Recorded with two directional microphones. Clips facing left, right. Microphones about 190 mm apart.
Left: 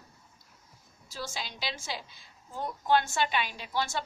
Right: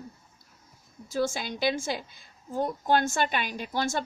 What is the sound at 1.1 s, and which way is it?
A woman's voice, 50° right (ahead or behind).